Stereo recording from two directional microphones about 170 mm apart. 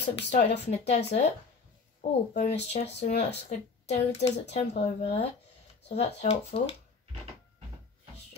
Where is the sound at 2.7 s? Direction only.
40° left (ahead or behind).